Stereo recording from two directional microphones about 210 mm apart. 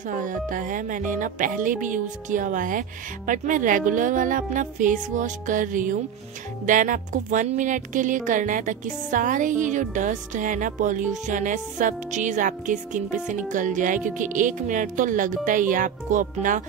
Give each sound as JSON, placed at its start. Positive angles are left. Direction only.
{"t": 0.2, "sound": "speech", "side_deg": -40}